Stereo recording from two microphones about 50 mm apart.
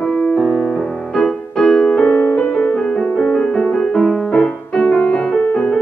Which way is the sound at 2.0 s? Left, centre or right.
Left.